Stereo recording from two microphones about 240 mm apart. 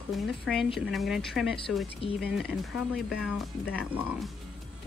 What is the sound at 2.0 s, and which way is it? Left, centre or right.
Speech, left.